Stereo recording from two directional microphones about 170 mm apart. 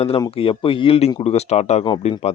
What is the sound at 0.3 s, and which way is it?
Speech, 30° left (ahead or behind).